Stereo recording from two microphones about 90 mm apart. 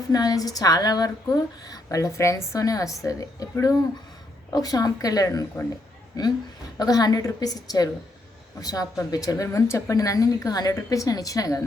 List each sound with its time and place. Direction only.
0.1 s a woman's voice: 45° left (ahead or behind)
4.5 s a woman's voice: 45° left (ahead or behind)
6.7 s a woman's voice: 45° left (ahead or behind)